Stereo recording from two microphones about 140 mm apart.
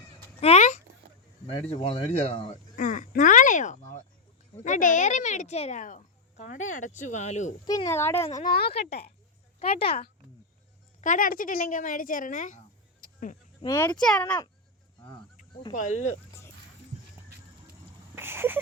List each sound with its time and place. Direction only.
0.3 s a sound: 50° left (ahead or behind)
1.7 s speech: 40° left (ahead or behind)
2.7 s a sound: 70° left (ahead or behind)
4.5 s speech: 60° left (ahead or behind)
7.9 s a child's voice: 15° left (ahead or behind)
8.3 s speech: 60° left (ahead or behind)
8.6 s speech: 45° left (ahead or behind)
11.0 s speech: 70° left (ahead or behind)
13.7 s speech: 20° left (ahead or behind)
14.0 s a child's voice: 5° left (ahead or behind)
15.7 s speech: 65° left (ahead or behind)
18.1 s a sound: 15° right (ahead or behind)